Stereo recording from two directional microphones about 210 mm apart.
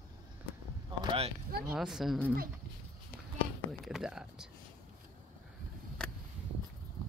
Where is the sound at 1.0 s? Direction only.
25° right (ahead or behind).